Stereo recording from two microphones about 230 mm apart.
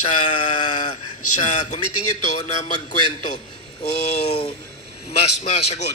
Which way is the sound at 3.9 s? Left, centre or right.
Left.